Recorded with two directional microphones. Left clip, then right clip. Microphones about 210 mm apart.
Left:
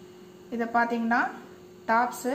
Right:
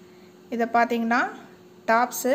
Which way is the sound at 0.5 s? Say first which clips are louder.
Right 4 dB; 50° right (ahead or behind).